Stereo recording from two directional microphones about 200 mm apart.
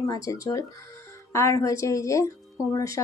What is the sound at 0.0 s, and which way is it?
Speech, 15° left (ahead or behind).